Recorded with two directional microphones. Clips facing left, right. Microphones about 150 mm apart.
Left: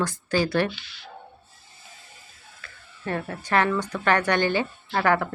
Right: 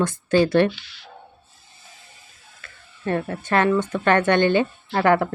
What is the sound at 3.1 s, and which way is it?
Speech, 25° right (ahead or behind).